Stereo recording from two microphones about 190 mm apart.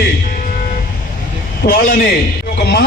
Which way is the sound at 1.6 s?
60° left (ahead or behind).